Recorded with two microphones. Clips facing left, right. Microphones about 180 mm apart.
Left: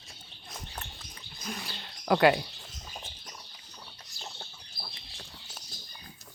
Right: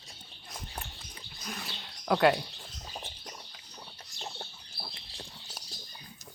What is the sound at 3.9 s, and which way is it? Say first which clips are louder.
Chicken: right 4 dB; 20° right (ahead or behind).